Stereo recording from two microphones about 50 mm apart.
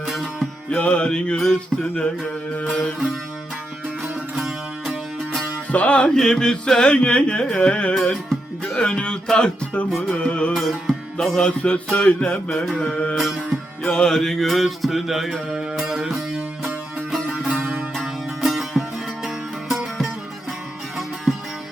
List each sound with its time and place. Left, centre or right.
0.0 s music: centre
0.8 s carnatic music: left
1.4 s a sound: centre
4.4 s music: centre
5.7 s carnatic music: left
6.1 s carnatic music: centre
7.9 s speech: centre
10.1 s carnatic music: left
10.5 s music: centre
11.4 s carnatic music: left
12.5 s a sound: centre
13.1 s music: centre
13.8 s music: centre